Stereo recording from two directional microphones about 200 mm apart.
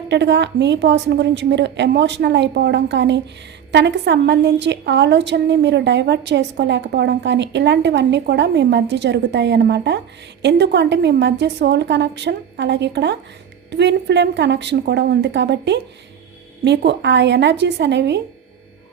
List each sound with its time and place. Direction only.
0.1 s a woman's voice: 60° right (ahead or behind)